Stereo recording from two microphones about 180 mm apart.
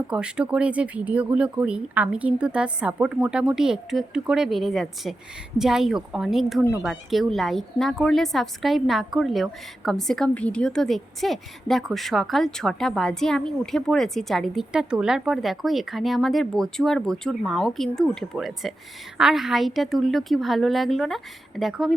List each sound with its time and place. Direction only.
0.1 s a woman's voice: 5° right (ahead or behind)